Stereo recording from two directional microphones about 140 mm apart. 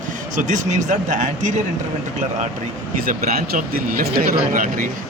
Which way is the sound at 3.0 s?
90° right.